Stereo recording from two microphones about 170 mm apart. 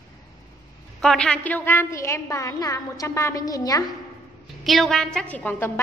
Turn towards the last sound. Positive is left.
turn(degrees=10)  # may be behind; listen again after turning